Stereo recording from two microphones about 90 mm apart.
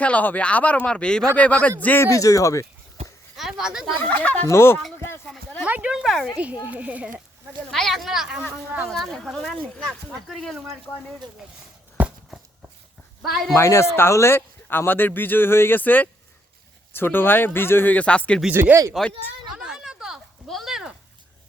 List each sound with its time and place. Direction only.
0.0 s speech: 15° left (ahead or behind)
2.0 s speech: 40° left (ahead or behind)
3.6 s a child's voice: 5° right (ahead or behind)
3.9 s speech: 15° left (ahead or behind)
4.4 s speech: 30° left (ahead or behind)
5.6 s a child's voice: 15° right (ahead or behind); by 6.3 s centre (ahead or behind)
6.3 s a child's voice: 15° right (ahead or behind)
7.7 s speech: centre (ahead or behind)
12.0 s walk: 20° right (ahead or behind)
13.6 s speech: 30° left (ahead or behind); by 18.4 s 10° left (ahead or behind)
18.5 s speech: 25° right (ahead or behind)
19.0 s speech: 5° left (ahead or behind)
19.5 s a sound: 5° right (ahead or behind)